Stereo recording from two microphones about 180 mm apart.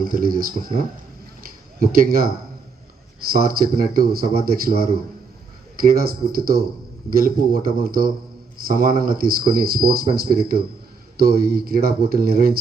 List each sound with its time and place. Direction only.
0.0 s speech: 55° right (ahead or behind)
1.8 s speech: 55° right (ahead or behind)
3.3 s speech: 55° right (ahead or behind)
5.9 s speech: 55° right (ahead or behind)